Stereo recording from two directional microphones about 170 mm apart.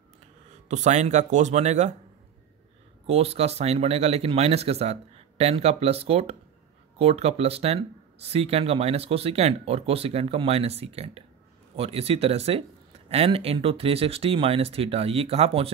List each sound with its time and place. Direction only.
0.7 s speech: 45° right (ahead or behind)
3.1 s speech: 35° right (ahead or behind)